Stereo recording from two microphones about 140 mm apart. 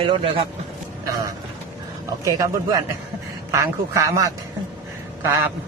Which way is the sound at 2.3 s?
25° right (ahead or behind).